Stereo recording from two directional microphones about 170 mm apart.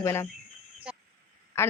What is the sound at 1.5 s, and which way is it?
Speech, 15° left (ahead or behind).